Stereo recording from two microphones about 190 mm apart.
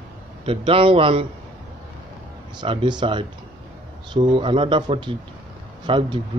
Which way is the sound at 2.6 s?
25° right (ahead or behind).